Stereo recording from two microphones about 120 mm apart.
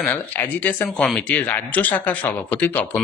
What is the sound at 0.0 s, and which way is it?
Speech, 15° left (ahead or behind).